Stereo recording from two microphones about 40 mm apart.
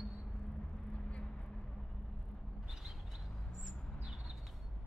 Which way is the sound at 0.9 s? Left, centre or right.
Left.